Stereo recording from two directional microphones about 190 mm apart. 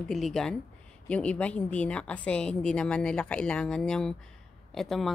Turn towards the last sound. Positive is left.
turn(degrees=0)  # may be behind; listen again after turning